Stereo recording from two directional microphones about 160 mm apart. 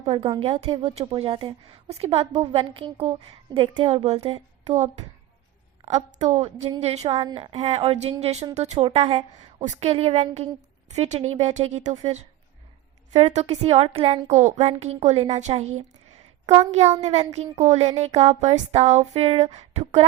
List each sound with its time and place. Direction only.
0.0 s a woman's voice: 40° right (ahead or behind)
7.2 s a woman's voice: 30° right (ahead or behind)
19.5 s a sound: 45° right (ahead or behind)